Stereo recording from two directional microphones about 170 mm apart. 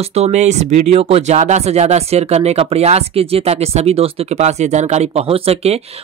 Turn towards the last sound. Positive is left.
turn(degrees=-35)  # may be behind; listen again after turning